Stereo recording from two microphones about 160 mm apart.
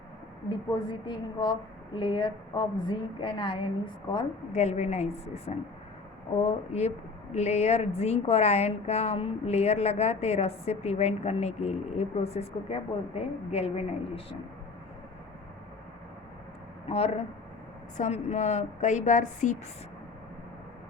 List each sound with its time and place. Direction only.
0.7 s a woman's voice: 30° left (ahead or behind)
4.5 s a woman's voice: 45° left (ahead or behind)
16.9 s a woman's voice: 40° left (ahead or behind)